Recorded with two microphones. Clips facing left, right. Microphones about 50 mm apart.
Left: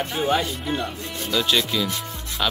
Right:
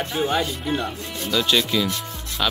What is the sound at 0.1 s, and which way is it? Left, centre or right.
Speech, centre.